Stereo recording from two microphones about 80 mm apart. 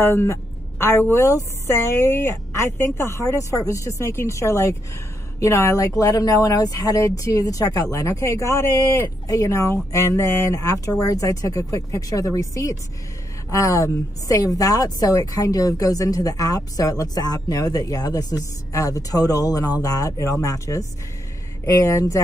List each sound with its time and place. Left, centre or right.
0.0 s a woman's voice: left